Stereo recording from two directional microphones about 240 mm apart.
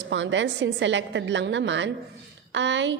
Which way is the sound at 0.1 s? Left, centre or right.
Right.